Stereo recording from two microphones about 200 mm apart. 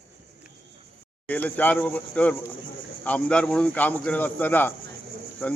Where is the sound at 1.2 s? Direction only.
10° left (ahead or behind).